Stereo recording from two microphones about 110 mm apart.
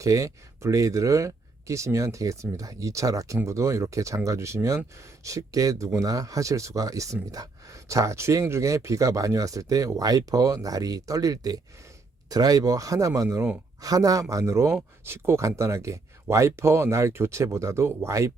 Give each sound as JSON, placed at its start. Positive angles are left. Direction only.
{"t": 0.0, "sound": "speech", "side_deg": -30}